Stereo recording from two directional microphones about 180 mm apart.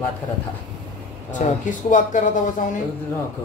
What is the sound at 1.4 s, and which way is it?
Speech, 45° left (ahead or behind).